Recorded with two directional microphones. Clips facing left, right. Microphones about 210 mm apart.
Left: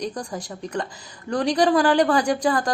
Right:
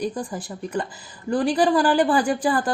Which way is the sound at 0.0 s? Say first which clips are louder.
Right 2 dB; 5° right (ahead or behind).